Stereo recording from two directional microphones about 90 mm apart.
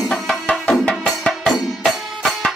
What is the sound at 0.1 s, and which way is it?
Music, 10° left (ahead or behind).